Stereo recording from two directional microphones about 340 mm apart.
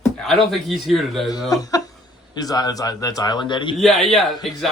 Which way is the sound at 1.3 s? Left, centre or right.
Centre.